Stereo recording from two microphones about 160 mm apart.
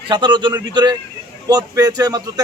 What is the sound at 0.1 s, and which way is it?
A man's voice, 30° right (ahead or behind).